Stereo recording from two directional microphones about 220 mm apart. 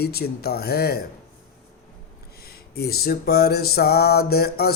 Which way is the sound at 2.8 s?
45° left (ahead or behind).